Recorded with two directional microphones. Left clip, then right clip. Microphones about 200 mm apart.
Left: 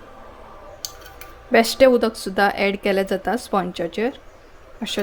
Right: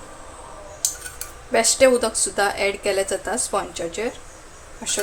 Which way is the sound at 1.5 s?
35° left (ahead or behind).